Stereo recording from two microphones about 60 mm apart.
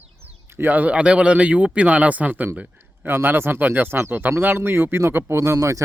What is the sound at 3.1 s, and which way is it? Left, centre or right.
Speech, right.